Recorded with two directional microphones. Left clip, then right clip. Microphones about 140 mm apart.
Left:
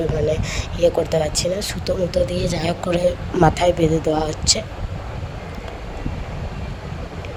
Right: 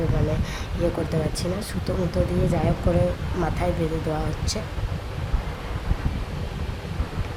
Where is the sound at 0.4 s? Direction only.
50° left (ahead or behind).